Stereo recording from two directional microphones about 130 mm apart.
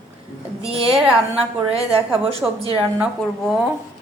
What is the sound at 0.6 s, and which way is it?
Speech, 50° right (ahead or behind).